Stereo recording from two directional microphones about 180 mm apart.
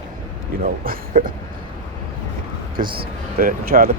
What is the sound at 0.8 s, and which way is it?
Speech, 50° right (ahead or behind).